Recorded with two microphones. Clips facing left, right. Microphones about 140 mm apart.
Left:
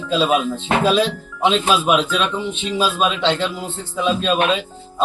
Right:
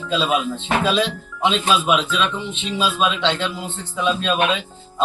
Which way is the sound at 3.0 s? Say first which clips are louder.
Left 1 dB; centre (ahead or behind).